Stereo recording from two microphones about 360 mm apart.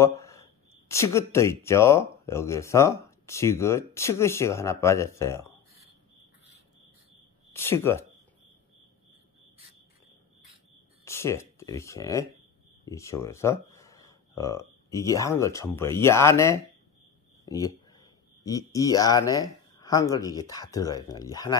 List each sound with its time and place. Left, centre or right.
0.0 s speech: centre
7.5 s speech: centre
11.1 s speech: centre